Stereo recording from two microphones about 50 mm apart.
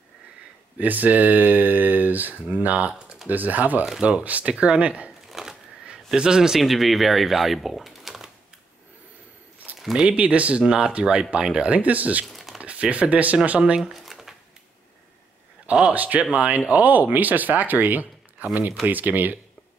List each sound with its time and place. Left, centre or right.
0.7 s speech: right
5.3 s speech: centre
9.9 s speech: right
10.6 s speech: centre
13.7 s a sound: centre
15.6 s a man's voice: right